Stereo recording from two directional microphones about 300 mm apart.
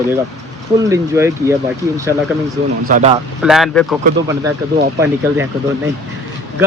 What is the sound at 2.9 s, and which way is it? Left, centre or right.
Speech, right.